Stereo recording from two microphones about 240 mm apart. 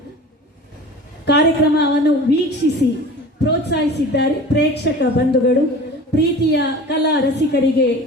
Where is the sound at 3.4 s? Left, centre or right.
Left.